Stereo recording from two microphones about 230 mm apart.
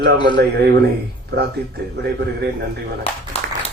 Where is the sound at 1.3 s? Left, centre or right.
Right.